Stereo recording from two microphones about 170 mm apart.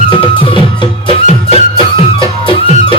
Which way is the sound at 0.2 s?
30° left (ahead or behind).